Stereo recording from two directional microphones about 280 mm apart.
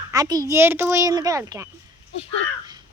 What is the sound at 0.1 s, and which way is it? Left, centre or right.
Speech, centre.